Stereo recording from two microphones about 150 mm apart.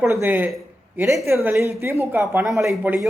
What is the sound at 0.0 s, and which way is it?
A man's voice, 15° right (ahead or behind).